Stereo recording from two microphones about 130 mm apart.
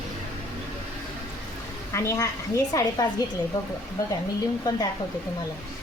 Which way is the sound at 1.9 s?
20° left (ahead or behind).